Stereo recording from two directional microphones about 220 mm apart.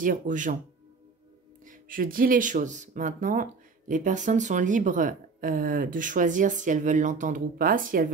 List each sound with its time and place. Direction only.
0.0 s speech: 35° right (ahead or behind)
1.7 s speech: 40° right (ahead or behind)